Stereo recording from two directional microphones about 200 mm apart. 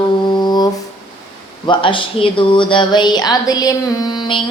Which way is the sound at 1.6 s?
25° left (ahead or behind).